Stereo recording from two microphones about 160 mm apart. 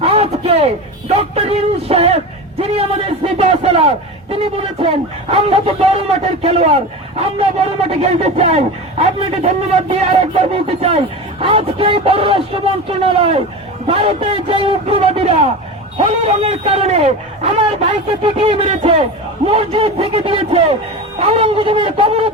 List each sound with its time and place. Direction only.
0.0 s speech: 40° right (ahead or behind)